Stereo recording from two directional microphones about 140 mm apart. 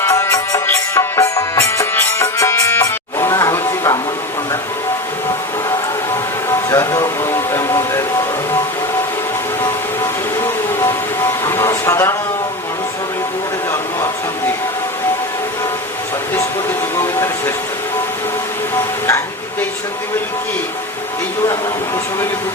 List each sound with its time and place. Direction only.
0.0 s music: 20° left (ahead or behind)
6.5 s music: 20° left (ahead or behind)
11.4 s vehicle: 20° left (ahead or behind)